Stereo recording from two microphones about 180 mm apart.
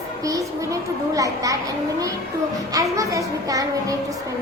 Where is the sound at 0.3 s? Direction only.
20° right (ahead or behind).